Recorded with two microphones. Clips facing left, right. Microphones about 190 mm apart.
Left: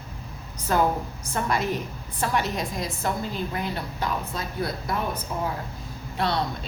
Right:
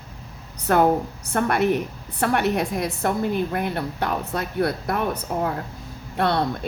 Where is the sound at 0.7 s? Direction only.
60° right (ahead or behind).